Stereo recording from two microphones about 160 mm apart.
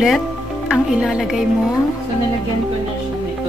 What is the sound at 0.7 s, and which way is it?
Speech, 5° right (ahead or behind).